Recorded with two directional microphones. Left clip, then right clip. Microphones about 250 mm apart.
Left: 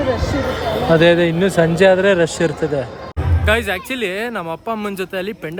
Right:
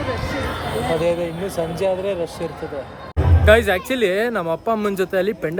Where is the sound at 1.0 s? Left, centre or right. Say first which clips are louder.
Left 8 dB; left.